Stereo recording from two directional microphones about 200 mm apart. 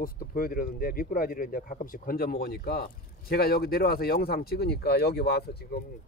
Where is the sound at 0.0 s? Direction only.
45° left (ahead or behind).